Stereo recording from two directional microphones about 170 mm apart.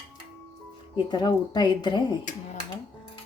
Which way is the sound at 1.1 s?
25° left (ahead or behind).